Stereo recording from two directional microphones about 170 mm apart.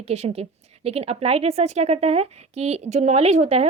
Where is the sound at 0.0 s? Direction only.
40° right (ahead or behind).